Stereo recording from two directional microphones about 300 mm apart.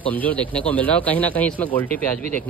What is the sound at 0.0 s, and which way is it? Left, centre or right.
Speech, centre.